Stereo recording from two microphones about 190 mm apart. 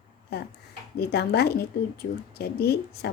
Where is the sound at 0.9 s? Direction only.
60° left (ahead or behind).